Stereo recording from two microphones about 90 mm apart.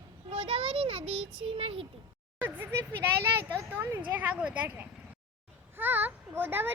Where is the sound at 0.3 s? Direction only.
90° right.